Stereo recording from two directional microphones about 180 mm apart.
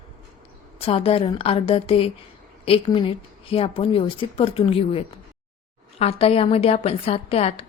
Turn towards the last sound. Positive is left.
turn(degrees=35)  # may be behind; listen again after turning